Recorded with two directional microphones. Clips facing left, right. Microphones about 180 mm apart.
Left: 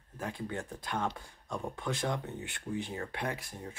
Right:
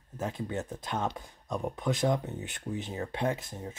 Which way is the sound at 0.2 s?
20° right (ahead or behind).